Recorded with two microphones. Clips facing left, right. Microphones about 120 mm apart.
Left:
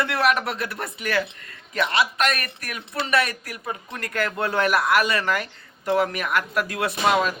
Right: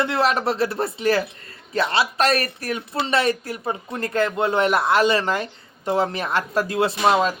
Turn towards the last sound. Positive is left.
turn(degrees=-25)  # may be behind; listen again after turning